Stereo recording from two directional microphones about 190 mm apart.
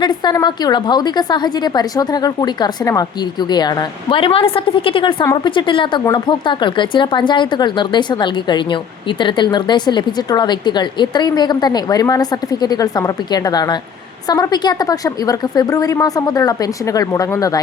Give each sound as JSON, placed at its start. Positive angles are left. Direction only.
{"t": 0.0, "sound": "a woman's voice", "side_deg": 25}
{"t": 4.1, "sound": "a woman's voice", "side_deg": 30}